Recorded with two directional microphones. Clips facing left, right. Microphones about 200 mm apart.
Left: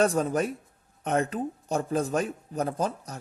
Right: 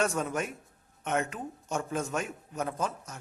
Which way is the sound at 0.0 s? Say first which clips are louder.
Left 6 dB; 35° left (ahead or behind).